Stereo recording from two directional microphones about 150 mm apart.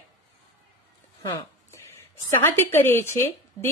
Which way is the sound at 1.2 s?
20° left (ahead or behind).